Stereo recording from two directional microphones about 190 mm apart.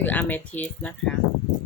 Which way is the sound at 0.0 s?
10° left (ahead or behind).